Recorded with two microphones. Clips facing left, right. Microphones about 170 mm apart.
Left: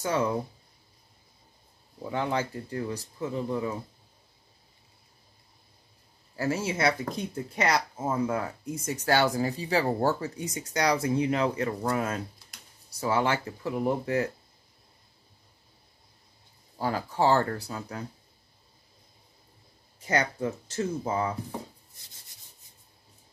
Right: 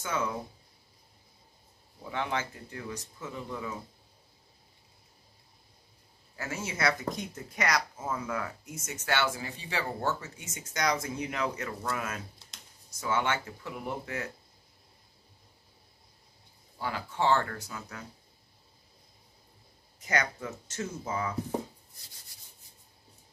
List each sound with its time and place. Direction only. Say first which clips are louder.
0.0 s speech: left 6 dB; 35° left (ahead or behind)
2.0 s speech: left 4 dB; 35° left (ahead or behind)
6.3 s speech: left 8 dB; 30° left (ahead or behind)
16.7 s speech: left 5 dB; 40° left (ahead or behind)
20.0 s speech: left 4 dB; 30° left (ahead or behind)